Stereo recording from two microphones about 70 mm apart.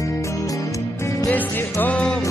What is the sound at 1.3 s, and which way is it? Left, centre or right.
Music, left.